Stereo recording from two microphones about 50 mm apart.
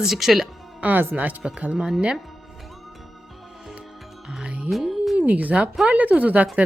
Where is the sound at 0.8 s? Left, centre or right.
Right.